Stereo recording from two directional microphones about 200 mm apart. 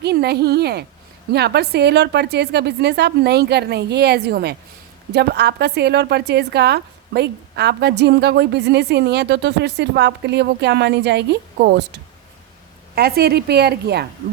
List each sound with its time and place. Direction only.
0.0 s a woman's voice: 55° right (ahead or behind)
13.0 s a woman's voice: 50° right (ahead or behind)